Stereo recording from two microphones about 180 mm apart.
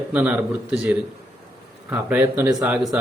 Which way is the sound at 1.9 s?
10° right (ahead or behind).